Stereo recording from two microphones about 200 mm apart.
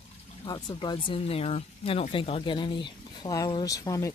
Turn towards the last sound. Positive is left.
turn(degrees=15)  # may be behind; listen again after turning